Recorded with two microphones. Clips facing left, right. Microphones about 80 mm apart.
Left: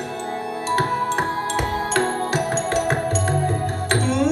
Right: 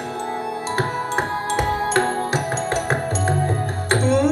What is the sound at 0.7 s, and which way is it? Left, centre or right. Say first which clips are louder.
Music: left 3 dB; right.